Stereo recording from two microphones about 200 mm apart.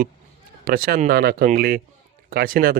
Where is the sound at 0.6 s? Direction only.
45° right (ahead or behind).